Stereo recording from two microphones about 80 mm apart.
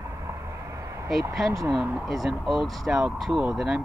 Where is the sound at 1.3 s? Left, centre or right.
Centre.